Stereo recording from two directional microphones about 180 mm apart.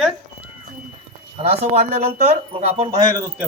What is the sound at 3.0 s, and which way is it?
Speech, 20° right (ahead or behind).